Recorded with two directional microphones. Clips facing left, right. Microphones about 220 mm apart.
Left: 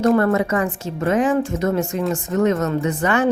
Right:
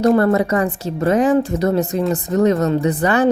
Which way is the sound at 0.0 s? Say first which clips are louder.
Right 2 dB; 30° right (ahead or behind).